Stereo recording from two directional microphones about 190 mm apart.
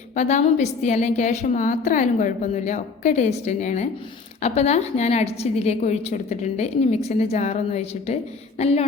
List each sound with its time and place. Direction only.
0.2 s a woman's voice: 40° left (ahead or behind)